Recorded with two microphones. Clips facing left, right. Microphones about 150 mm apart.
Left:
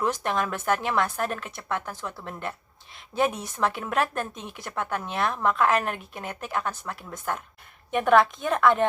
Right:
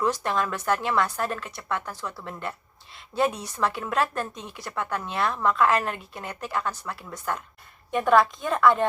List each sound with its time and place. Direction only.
0.0 s speech: 50° left (ahead or behind)
7.9 s a woman's voice: 60° left (ahead or behind)